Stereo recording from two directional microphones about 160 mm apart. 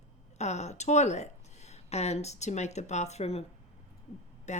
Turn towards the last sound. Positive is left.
turn(degrees=45)  # may be behind; listen again after turning